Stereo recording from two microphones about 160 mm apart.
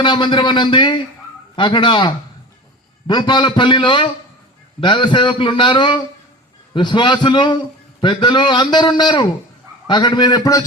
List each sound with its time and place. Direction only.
0.0 s a man's voice: 30° left (ahead or behind)